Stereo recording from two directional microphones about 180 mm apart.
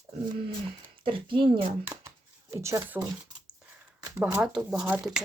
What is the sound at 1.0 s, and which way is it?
Speech, 30° right (ahead or behind).